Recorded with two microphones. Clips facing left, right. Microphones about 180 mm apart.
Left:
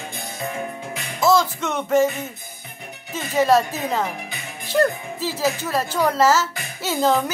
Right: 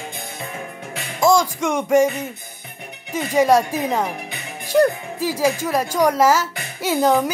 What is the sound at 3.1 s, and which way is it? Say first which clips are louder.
A woman's voice: right 2 dB; 15° right (ahead or behind).